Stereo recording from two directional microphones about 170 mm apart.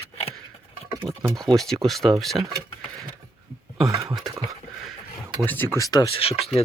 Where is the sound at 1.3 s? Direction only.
Centre (ahead or behind).